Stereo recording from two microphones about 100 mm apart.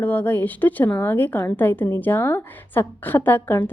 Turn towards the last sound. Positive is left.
turn(degrees=20)  # may be behind; listen again after turning